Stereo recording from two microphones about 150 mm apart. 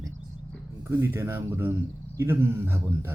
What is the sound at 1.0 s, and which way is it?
Speech, 15° right (ahead or behind).